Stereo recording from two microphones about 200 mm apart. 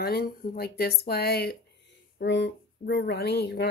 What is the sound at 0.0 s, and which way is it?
Speech, 50° left (ahead or behind).